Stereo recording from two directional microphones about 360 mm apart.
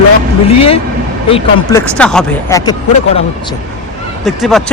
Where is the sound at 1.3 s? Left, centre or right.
Centre.